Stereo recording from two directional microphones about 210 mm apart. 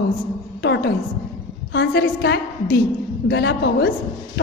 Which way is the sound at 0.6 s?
55° left (ahead or behind).